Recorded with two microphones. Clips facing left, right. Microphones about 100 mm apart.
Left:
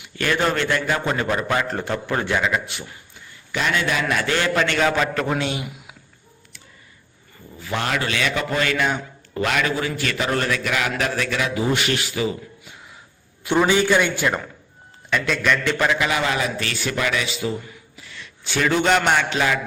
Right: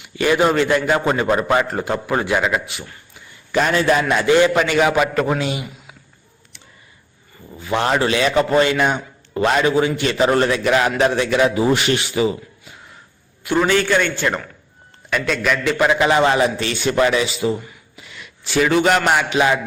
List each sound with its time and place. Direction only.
0.2 s a man's voice: 15° right (ahead or behind)
0.9 s a man's voice: 20° right (ahead or behind)
1.3 s a man's voice: 25° right (ahead or behind)
1.6 s a man's voice: 10° right (ahead or behind)
3.5 s a man's voice: 40° right (ahead or behind)
4.1 s a man's voice: 20° right (ahead or behind)
7.6 s a man's voice: 25° right (ahead or behind)
13.6 s a man's voice: 15° left (ahead or behind)
15.1 s a man's voice: centre (ahead or behind)
16.0 s a man's voice: 30° right (ahead or behind)
17.9 s a sound: 10° right (ahead or behind)
18.4 s a man's voice: 5° right (ahead or behind)